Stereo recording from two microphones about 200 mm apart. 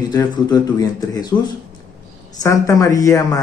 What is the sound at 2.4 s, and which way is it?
A woman's voice, 15° left (ahead or behind).